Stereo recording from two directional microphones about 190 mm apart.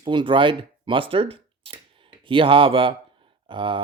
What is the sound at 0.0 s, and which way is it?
Speech, 25° right (ahead or behind).